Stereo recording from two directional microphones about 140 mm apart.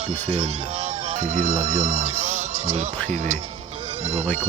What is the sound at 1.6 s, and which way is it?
Speech, 55° right (ahead or behind).